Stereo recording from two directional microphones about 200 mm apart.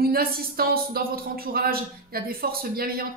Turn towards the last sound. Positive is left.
turn(degrees=-45)  # may be behind; listen again after turning